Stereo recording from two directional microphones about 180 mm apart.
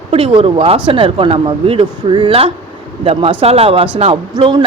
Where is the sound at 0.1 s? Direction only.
30° right (ahead or behind).